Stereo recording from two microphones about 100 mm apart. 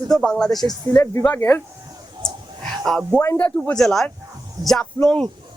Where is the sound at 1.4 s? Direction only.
25° left (ahead or behind).